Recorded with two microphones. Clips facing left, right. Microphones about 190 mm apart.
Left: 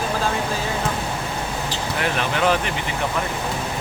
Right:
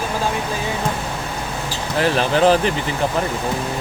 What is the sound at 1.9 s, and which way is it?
Speech, 35° right (ahead or behind).